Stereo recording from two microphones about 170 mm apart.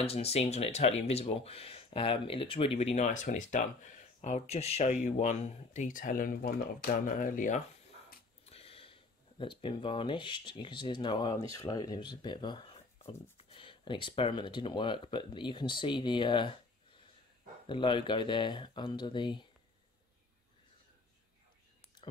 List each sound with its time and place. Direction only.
0.0 s speech: 35° left (ahead or behind)
8.5 s speech: 35° left (ahead or behind)
17.6 s speech: 30° left (ahead or behind)